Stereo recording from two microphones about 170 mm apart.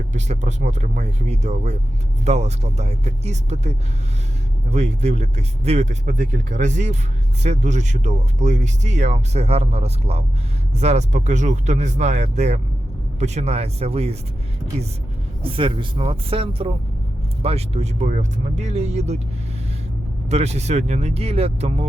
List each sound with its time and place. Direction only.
0.1 s speech: 45° right (ahead or behind)
15.4 s speech: 30° right (ahead or behind)
20.3 s speech: 40° right (ahead or behind)